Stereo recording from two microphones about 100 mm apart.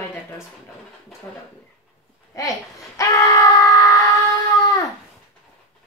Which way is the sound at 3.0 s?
35° left (ahead or behind).